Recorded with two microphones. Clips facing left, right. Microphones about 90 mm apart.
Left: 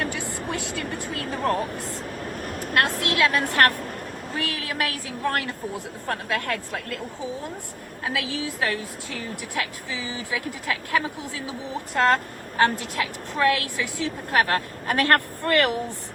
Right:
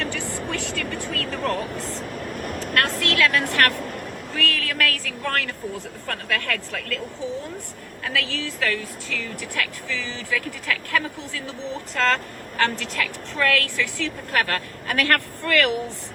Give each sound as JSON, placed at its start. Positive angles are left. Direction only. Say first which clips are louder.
{"t": 0.0, "sound": "vehicle", "louder": "even", "side_deg": 15}
{"t": 0.6, "sound": "vehicle", "louder": "right 1 dB", "side_deg": -70}
{"t": 1.3, "sound": "vehicle", "louder": "left 3 dB", "side_deg": 20}
{"t": 2.7, "sound": "speech", "louder": "even", "side_deg": 20}
{"t": 4.9, "sound": "a woman's voice", "louder": "right 4 dB", "side_deg": -65}
{"t": 5.2, "sound": "speech", "louder": "left 1 dB", "side_deg": 20}
{"t": 8.0, "sound": "a woman's voice", "louder": "even", "side_deg": 15}